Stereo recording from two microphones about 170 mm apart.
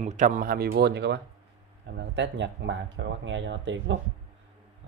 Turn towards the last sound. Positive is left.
turn(degrees=-90)